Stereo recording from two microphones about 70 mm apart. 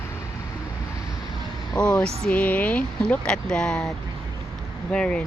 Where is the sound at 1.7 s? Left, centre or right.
Centre.